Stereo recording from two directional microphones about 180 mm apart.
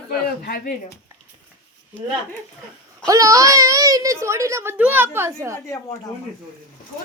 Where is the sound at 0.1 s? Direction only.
55° left (ahead or behind).